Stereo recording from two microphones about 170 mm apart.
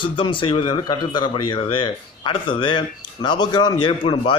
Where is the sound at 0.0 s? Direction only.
30° left (ahead or behind).